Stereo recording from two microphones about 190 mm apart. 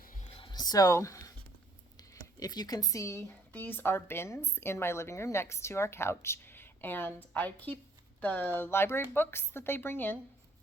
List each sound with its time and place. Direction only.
0.0 s music: 45° left (ahead or behind)
0.3 s a sound: 25° left (ahead or behind)
2.0 s speech: 20° left (ahead or behind)